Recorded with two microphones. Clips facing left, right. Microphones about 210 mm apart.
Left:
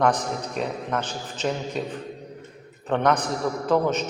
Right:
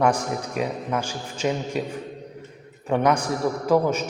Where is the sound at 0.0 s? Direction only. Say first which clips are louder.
Right 1 dB; 10° right (ahead or behind).